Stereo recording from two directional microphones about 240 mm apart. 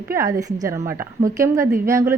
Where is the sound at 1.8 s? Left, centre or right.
Centre.